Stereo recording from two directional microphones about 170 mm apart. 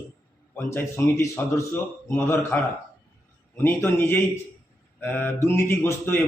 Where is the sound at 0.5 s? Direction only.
15° left (ahead or behind).